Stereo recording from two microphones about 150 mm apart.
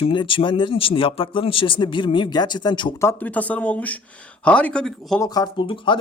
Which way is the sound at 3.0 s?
15° left (ahead or behind).